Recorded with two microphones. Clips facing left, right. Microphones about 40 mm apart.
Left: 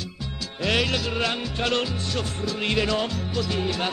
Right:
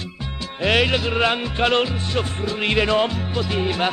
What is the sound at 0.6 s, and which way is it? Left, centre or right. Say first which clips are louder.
Music: right 5 dB; right.